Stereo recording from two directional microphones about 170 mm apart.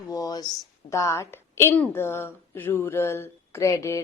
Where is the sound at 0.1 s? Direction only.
20° left (ahead or behind).